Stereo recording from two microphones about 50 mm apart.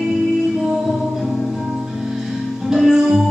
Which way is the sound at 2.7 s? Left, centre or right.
Centre.